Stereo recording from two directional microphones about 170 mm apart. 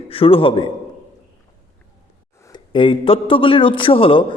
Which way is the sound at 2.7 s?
30° left (ahead or behind).